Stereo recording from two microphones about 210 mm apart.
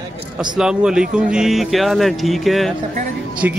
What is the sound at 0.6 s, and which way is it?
Speech, 5° right (ahead or behind).